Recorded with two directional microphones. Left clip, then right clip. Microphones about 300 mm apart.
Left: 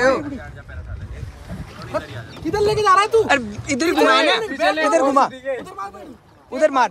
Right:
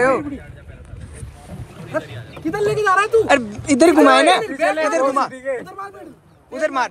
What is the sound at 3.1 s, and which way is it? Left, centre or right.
Speech, centre.